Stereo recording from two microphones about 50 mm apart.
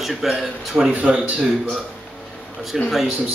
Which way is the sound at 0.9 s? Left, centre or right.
Right.